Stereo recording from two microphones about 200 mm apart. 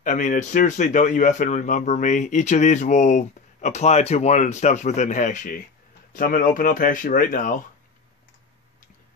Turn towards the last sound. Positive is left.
turn(degrees=45)  # may be behind; listen again after turning